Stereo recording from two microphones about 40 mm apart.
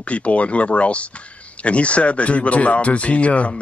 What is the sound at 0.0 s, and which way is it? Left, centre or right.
Speech, left.